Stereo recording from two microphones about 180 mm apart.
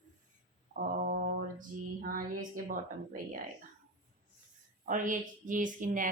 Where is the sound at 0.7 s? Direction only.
55° right (ahead or behind).